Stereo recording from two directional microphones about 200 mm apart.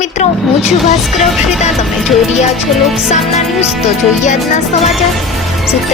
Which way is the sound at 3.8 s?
35° left (ahead or behind).